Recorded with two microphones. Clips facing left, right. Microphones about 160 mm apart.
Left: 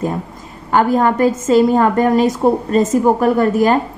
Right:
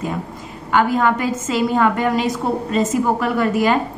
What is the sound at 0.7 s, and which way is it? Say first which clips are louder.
A woman's voice: left 3 dB; 40° left (ahead or behind).